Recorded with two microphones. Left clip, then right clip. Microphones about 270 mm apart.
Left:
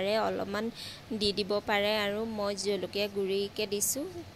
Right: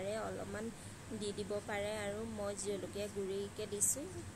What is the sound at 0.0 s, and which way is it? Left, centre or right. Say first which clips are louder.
A woman's voice: left 12 dB; left.